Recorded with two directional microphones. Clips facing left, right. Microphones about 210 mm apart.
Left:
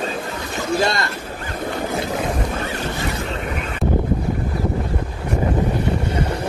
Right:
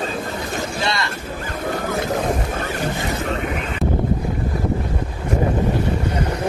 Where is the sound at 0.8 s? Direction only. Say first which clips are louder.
Left 4 dB; 50° left (ahead or behind).